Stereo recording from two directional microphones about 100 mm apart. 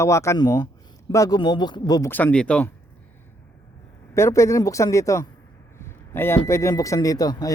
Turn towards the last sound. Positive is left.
turn(degrees=40)  # may be behind; listen again after turning